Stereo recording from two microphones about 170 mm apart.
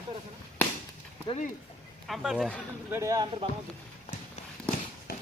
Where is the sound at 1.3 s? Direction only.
45° left (ahead or behind).